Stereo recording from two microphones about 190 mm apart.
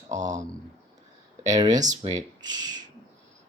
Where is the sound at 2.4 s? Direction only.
20° right (ahead or behind).